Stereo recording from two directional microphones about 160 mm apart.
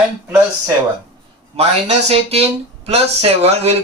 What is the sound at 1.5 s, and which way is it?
Speech, 40° right (ahead or behind).